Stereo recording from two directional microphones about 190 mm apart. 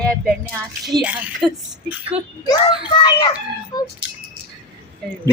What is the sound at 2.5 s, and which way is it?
A child's voice, 25° left (ahead or behind).